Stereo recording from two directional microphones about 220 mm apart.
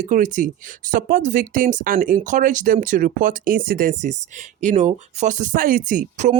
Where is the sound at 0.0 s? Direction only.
35° right (ahead or behind).